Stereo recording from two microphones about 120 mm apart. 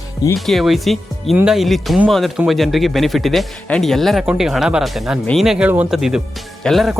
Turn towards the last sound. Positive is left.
turn(degrees=0)  # may be behind; listen again after turning